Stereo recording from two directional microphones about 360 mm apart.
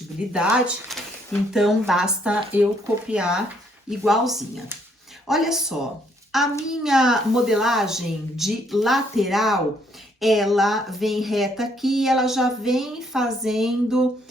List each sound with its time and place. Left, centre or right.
0.3 s speech: centre